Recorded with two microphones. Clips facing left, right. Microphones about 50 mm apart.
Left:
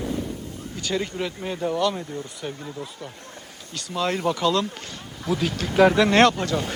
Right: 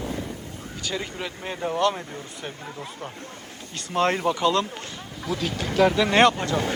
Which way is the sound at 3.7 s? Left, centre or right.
Right.